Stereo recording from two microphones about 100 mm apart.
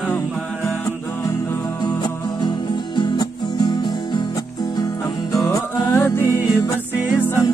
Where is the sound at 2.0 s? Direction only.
50° left (ahead or behind).